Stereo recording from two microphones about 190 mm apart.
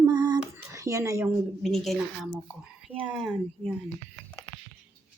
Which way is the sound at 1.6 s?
Centre (ahead or behind).